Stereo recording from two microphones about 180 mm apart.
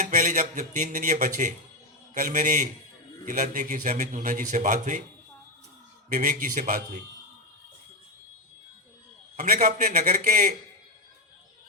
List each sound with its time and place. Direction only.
0.0 s a man's voice: 45° right (ahead or behind)
6.1 s a man's voice: 50° right (ahead or behind)
9.3 s a man's voice: 45° right (ahead or behind)